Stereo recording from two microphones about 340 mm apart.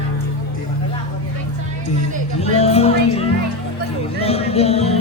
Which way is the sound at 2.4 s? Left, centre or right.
Centre.